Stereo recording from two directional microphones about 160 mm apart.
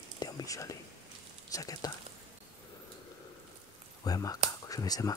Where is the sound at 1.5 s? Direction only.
20° left (ahead or behind).